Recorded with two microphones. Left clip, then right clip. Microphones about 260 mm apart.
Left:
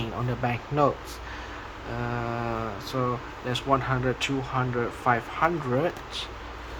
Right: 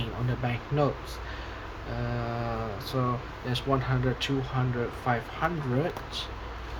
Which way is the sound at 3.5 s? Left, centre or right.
Centre.